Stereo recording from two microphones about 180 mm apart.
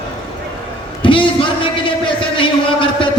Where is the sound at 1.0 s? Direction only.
30° left (ahead or behind).